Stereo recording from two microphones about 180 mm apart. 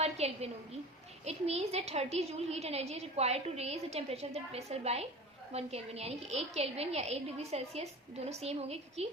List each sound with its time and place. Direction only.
0.0 s a woman's voice: 35° right (ahead or behind)